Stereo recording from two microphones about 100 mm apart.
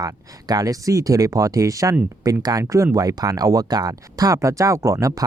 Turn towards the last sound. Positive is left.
turn(degrees=-35)  # may be behind; listen again after turning